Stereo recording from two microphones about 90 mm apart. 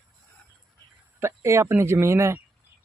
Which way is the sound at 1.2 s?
30° right (ahead or behind).